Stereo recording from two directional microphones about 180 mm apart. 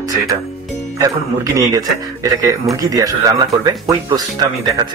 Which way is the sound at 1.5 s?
20° right (ahead or behind).